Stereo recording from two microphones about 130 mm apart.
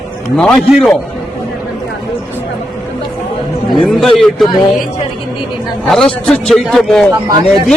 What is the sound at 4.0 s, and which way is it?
Speech, centre (ahead or behind).